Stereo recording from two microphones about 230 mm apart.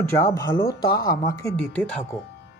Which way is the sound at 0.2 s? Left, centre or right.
Centre.